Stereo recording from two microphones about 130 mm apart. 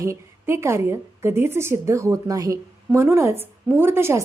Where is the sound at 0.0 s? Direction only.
20° right (ahead or behind).